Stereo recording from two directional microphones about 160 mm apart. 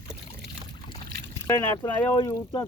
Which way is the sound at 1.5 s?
20° left (ahead or behind).